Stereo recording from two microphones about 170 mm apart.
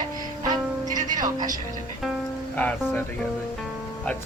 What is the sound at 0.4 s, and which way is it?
Music, 20° right (ahead or behind).